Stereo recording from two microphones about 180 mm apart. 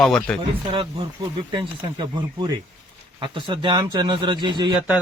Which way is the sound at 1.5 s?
25° right (ahead or behind).